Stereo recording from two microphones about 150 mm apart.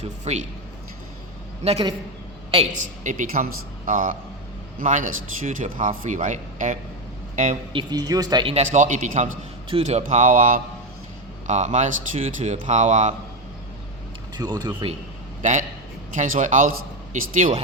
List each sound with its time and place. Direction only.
0.0 s speech: 50° right (ahead or behind)
1.6 s speech: 45° right (ahead or behind)
3.0 s a man's voice: 55° right (ahead or behind)
7.7 s speech: 30° right (ahead or behind)
8.5 s a man's voice: 55° right (ahead or behind)
9.6 s a man's voice: 45° right (ahead or behind); by 10.6 s 65° right (ahead or behind)
11.4 s speech: 50° right (ahead or behind)
14.3 s speech: 30° right (ahead or behind)
15.4 s a man's voice: 55° right (ahead or behind)